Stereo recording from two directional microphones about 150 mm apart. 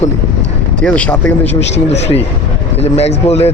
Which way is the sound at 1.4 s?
45° left (ahead or behind).